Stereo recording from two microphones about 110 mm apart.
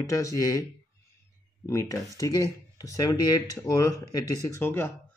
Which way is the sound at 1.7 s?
30° left (ahead or behind).